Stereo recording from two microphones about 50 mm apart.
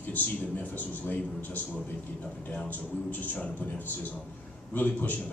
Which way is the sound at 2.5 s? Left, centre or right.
Left.